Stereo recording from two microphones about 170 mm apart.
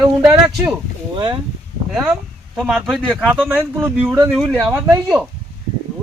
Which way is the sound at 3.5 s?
10° right (ahead or behind).